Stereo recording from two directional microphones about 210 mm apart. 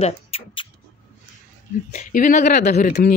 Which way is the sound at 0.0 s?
30° left (ahead or behind).